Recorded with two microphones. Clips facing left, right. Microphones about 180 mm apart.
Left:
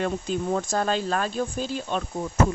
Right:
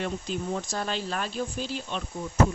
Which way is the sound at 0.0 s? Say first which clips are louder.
Left 5 dB; 50° left (ahead or behind).